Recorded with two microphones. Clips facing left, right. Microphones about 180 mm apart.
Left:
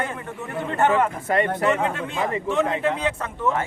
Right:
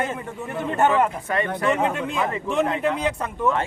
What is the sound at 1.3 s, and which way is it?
Speech, 30° left (ahead or behind).